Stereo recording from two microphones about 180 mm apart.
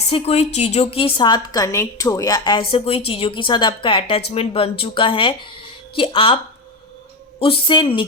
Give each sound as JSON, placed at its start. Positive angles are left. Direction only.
{"t": 0.1, "sound": "a woman's voice", "side_deg": 35}